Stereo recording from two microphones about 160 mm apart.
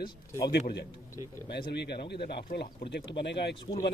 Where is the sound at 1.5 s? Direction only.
90° left.